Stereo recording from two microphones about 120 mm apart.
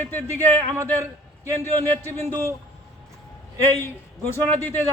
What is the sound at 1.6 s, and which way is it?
Speech, 20° left (ahead or behind).